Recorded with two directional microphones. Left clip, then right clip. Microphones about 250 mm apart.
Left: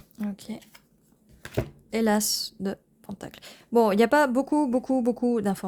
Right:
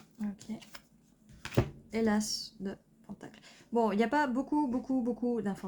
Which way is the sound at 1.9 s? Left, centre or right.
Left.